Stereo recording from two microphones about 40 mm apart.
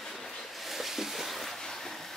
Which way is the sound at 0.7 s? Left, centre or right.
Centre.